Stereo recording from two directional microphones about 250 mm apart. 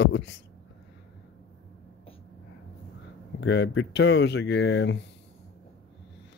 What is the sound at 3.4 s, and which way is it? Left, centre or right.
Speech, left.